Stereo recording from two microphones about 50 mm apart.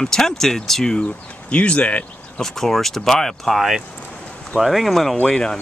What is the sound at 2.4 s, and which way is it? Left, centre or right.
Speech, centre.